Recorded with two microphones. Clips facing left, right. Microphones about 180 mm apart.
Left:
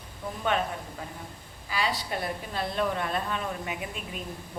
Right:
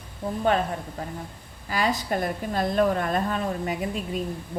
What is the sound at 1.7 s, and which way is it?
A woman's voice, 45° right (ahead or behind).